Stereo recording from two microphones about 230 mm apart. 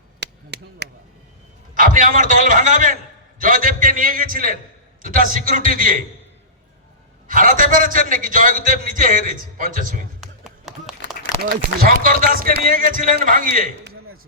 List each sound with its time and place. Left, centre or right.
0.2 s chop: right
1.7 s a man's voice: right
7.3 s a man's voice: right
10.2 s a sound: centre
11.2 s a man's voice: right